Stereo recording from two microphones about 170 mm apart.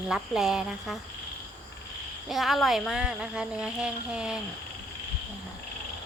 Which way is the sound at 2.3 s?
Centre (ahead or behind).